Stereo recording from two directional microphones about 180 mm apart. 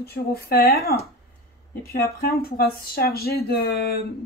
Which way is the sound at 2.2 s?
55° left (ahead or behind).